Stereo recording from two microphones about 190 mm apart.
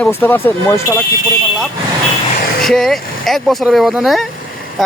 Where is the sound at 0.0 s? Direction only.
10° left (ahead or behind).